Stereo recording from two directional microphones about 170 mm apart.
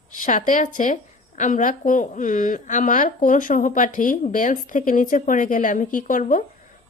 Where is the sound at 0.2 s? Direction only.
50° left (ahead or behind).